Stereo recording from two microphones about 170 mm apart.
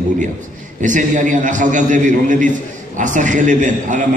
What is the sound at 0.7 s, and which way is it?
A man's voice, 45° right (ahead or behind).